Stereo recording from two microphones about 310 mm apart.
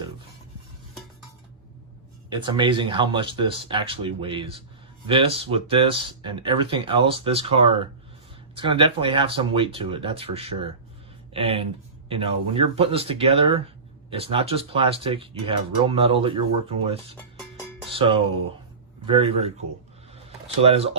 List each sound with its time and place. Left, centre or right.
2.3 s speech: centre
20.6 s speech: centre